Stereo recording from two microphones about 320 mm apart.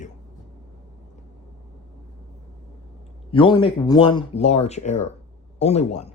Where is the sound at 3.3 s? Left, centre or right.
Centre.